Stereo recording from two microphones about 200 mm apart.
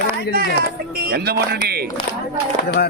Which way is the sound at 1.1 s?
50° right (ahead or behind).